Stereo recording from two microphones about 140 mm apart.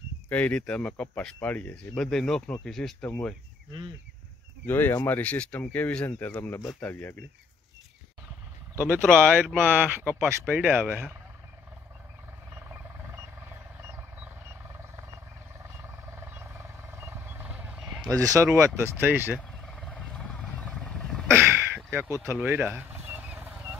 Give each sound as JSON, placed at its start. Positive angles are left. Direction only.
{"t": 0.3, "sound": "speech", "side_deg": 10}
{"t": 4.6, "sound": "speech", "side_deg": 15}
{"t": 9.1, "sound": "speech", "side_deg": -10}
{"t": 12.6, "sound": "vehicle", "side_deg": -15}
{"t": 15.6, "sound": "wild animals", "side_deg": -20}
{"t": 18.1, "sound": "speech", "side_deg": -20}
{"t": 19.6, "sound": "wild animals", "side_deg": 5}
{"t": 21.3, "sound": "a sound", "side_deg": -15}